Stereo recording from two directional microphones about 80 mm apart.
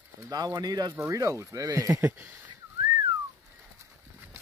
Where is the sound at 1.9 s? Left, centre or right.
Right.